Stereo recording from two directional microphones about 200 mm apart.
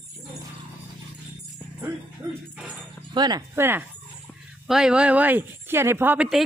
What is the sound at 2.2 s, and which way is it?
Dog, 15° right (ahead or behind).